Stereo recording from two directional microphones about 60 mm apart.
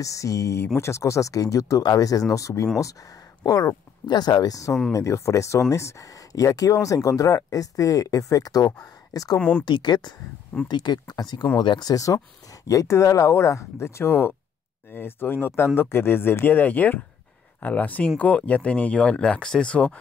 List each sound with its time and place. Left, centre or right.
0.0 s speech: left
3.4 s speech: left
4.4 s speech: left
4.9 s speech: left
9.4 s speech: left
11.8 s speech: left
12.6 s speech: left